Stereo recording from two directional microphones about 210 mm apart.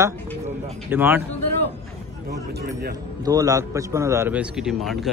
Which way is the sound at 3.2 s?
15° right (ahead or behind).